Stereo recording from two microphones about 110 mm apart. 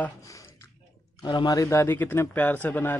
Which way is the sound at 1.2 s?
40° left (ahead or behind).